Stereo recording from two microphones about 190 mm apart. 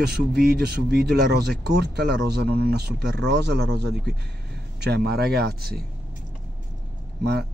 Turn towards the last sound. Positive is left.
turn(degrees=-60)  # may be behind; listen again after turning